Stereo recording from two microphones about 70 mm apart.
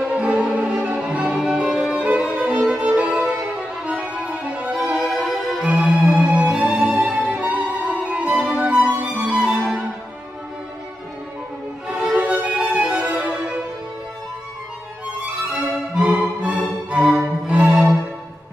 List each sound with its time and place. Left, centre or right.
0.1 s violin: centre
2.0 s music: centre
4.9 s music: centre
5.6 s music: centre
5.9 s music: centre
6.6 s music: centre
11.9 s music: centre
12.2 s music: right
16.2 s music: centre